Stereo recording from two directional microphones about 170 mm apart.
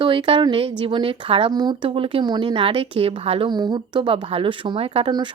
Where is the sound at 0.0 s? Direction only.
30° right (ahead or behind).